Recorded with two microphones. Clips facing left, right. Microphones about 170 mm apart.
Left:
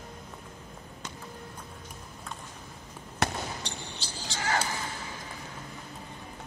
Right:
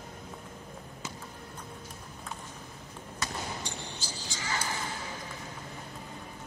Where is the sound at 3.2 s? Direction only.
70° left (ahead or behind).